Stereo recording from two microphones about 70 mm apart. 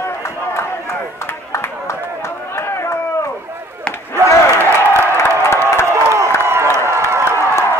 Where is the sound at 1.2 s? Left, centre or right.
Left.